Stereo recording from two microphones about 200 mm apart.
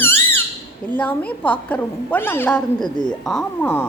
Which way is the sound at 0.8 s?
10° left (ahead or behind).